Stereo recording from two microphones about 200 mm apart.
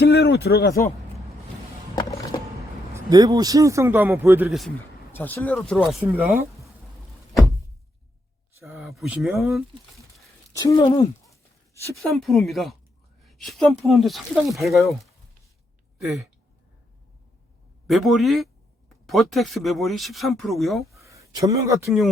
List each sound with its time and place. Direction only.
0.0 s speech: 55° left (ahead or behind)
2.9 s speech: 20° right (ahead or behind)
5.1 s speech: 10° left (ahead or behind); by 6.4 s 10° right (ahead or behind)
8.7 s speech: centre (ahead or behind)
10.5 s a sound: 15° left (ahead or behind)
11.9 s speech: centre (ahead or behind)
17.8 s speech: centre (ahead or behind)
21.0 s speech: 15° right (ahead or behind)